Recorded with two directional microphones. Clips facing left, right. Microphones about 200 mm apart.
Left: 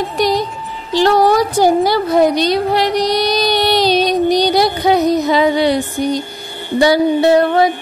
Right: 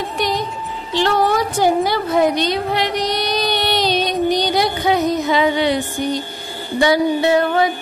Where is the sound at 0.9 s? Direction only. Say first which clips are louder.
Left 5 dB; 40° left (ahead or behind).